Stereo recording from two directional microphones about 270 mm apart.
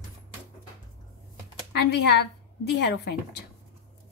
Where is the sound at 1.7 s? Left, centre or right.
Left.